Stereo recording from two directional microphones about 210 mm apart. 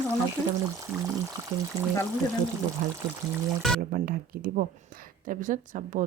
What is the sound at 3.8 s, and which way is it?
Speech, 40° right (ahead or behind).